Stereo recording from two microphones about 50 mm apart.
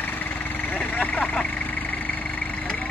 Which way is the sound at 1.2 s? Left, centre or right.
Centre.